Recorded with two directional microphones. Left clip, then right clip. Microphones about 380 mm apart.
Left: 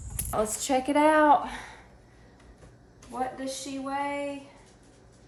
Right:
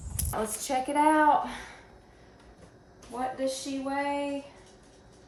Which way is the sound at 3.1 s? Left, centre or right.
Centre.